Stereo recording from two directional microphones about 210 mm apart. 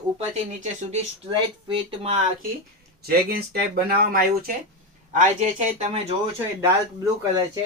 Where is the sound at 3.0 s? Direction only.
45° right (ahead or behind).